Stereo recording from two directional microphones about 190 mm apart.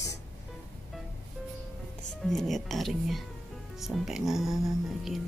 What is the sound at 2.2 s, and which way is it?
Speech, centre (ahead or behind).